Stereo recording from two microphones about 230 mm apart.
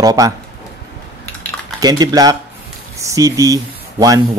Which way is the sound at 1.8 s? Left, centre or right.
Centre.